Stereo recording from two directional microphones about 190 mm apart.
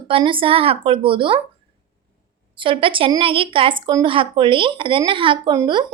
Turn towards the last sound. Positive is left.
turn(degrees=-20)  # may be behind; listen again after turning